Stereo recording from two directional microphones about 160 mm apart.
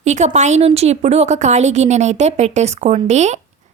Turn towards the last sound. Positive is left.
turn(degrees=-45)  # may be behind; listen again after turning